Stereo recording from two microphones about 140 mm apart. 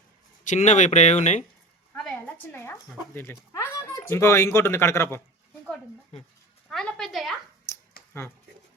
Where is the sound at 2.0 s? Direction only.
10° left (ahead or behind).